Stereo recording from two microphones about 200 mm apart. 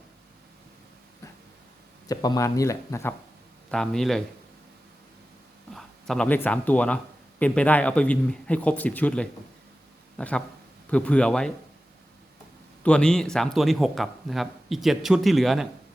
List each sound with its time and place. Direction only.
2.0 s speech: 20° left (ahead or behind)
3.7 s a man's voice: centre (ahead or behind)
5.7 s a man's voice: 5° left (ahead or behind)
12.8 s a man's voice: 5° left (ahead or behind)